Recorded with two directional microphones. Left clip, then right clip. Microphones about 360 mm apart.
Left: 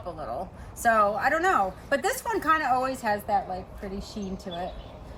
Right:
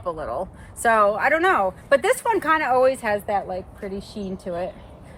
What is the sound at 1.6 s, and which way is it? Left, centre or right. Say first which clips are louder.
Speech: right 6 dB; centre.